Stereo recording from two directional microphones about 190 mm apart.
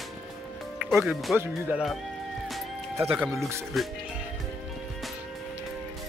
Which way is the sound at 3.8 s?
Centre (ahead or behind).